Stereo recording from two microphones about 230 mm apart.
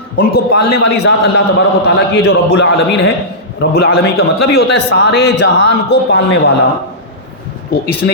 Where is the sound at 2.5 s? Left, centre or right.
Left.